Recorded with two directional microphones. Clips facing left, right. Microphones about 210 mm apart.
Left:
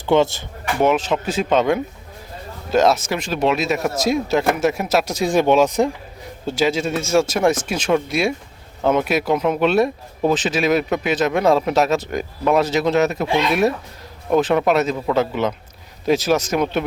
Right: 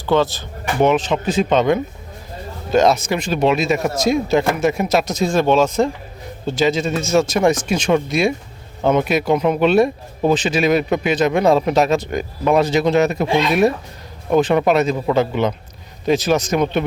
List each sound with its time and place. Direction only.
0.0 s speech: 20° left (ahead or behind)
0.8 s speech: 5° left (ahead or behind)